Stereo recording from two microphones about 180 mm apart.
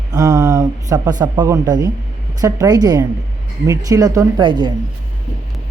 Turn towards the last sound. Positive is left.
turn(degrees=-25)  # may be behind; listen again after turning